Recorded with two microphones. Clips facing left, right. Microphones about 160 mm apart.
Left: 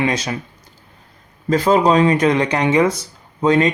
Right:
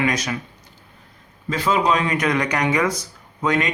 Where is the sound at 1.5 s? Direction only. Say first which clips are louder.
Left 6 dB; 40° left (ahead or behind).